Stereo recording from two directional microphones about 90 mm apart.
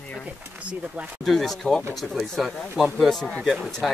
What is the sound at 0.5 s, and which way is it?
Speech, 15° right (ahead or behind).